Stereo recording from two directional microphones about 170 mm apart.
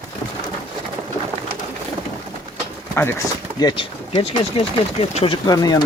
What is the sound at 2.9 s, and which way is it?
Speech, 15° left (ahead or behind).